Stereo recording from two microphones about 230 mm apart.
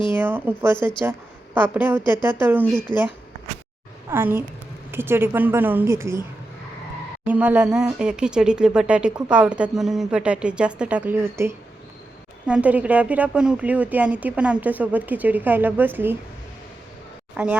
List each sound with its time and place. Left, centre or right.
0.2 s speech: centre
0.8 s speech: centre
1.5 s speech: centre
4.1 s speech: centre
7.3 s speech: centre
17.3 s speech: centre